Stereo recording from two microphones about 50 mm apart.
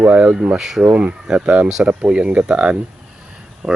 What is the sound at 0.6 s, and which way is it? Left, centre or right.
Speech, centre.